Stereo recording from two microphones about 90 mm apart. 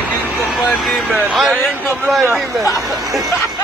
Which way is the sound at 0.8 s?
Centre (ahead or behind).